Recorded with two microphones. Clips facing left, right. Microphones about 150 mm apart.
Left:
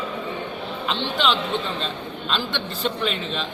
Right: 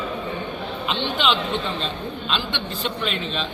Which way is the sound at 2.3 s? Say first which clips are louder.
Even; 40° left (ahead or behind).